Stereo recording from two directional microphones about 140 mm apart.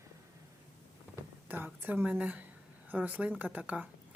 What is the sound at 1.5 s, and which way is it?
A woman's voice, 15° right (ahead or behind).